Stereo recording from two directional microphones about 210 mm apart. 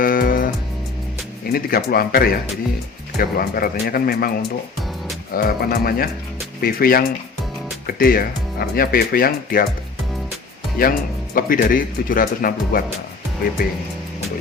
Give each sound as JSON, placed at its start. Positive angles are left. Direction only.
{"t": 0.0, "sound": "music", "side_deg": 40}
{"t": 1.5, "sound": "speech", "side_deg": 45}
{"t": 5.3, "sound": "speech", "side_deg": 45}
{"t": 10.8, "sound": "speech", "side_deg": 40}